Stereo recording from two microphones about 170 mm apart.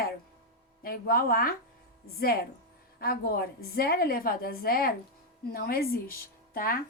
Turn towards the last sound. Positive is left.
turn(degrees=60)  # may be behind; listen again after turning